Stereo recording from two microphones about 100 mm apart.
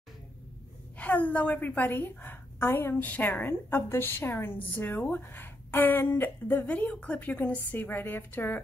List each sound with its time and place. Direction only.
0.9 s a woman's voice: 15° left (ahead or behind)